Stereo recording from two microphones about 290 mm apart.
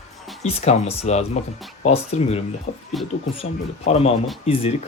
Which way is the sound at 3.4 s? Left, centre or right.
Left.